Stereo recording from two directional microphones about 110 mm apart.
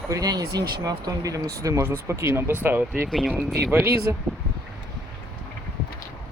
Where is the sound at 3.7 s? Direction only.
20° right (ahead or behind).